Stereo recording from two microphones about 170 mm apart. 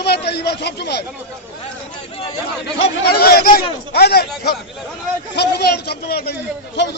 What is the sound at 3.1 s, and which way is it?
Speech, 65° left (ahead or behind).